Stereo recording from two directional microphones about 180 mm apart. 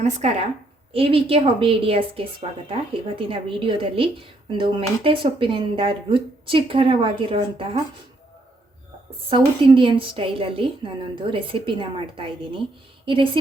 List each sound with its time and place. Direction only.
0.0 s a woman's voice: 35° right (ahead or behind)
9.6 s speech: 30° right (ahead or behind)